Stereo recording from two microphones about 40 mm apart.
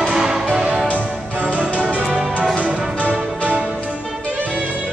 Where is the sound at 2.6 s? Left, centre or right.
Right.